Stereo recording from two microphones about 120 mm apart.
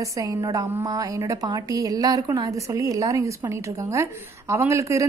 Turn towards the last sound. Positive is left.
turn(degrees=-25)  # may be behind; listen again after turning